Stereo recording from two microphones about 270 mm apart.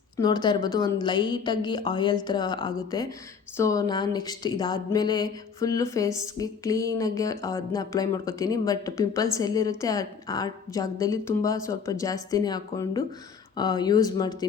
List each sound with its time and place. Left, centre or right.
0.2 s speech: centre